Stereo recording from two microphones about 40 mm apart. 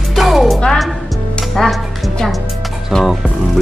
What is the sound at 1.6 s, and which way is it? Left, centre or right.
Speech, centre.